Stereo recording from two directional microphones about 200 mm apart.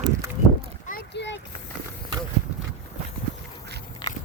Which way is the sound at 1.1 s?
60° left (ahead or behind).